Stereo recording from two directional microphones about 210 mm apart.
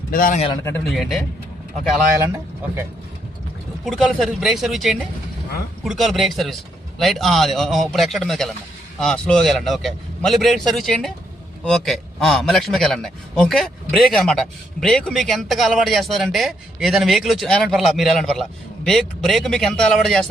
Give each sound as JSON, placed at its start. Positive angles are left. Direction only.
{"t": 0.1, "sound": "a man's voice", "side_deg": 40}
{"t": 0.4, "sound": "speech", "side_deg": 15}
{"t": 0.9, "sound": "a man's voice", "side_deg": 0}
{"t": 2.2, "sound": "speech", "side_deg": -10}
{"t": 3.8, "sound": "a man's voice", "side_deg": 0}